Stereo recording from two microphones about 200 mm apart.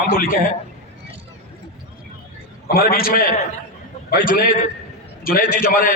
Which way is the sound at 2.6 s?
45° left (ahead or behind).